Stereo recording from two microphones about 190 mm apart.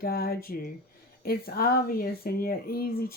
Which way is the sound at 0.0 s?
55° left (ahead or behind).